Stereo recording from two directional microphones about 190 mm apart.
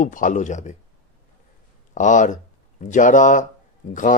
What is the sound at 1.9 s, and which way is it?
Speech, 40° left (ahead or behind).